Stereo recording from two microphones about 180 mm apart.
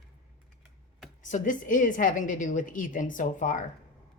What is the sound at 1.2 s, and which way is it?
A woman's voice, 45° left (ahead or behind).